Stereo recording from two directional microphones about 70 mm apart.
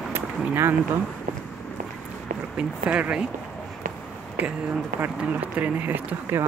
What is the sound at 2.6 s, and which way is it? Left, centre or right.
Speech, centre.